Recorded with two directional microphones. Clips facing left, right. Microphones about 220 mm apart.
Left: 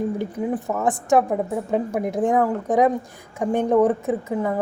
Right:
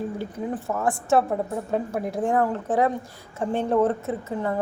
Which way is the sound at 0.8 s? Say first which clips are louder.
Left 2 dB; 15° left (ahead or behind).